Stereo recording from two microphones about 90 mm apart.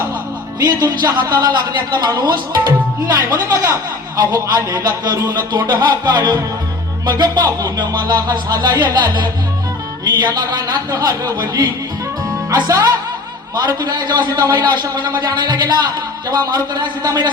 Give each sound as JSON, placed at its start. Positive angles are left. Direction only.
{"t": 0.6, "sound": "a man's voice", "side_deg": -45}